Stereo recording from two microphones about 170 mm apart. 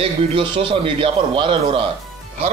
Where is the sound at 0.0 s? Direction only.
30° right (ahead or behind).